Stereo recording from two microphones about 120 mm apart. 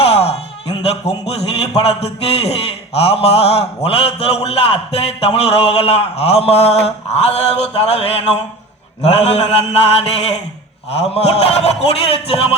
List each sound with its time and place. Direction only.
0.0 s music: 55° left (ahead or behind)
0.9 s a man's voice: 60° left (ahead or behind)